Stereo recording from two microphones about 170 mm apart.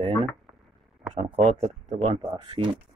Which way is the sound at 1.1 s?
40° right (ahead or behind).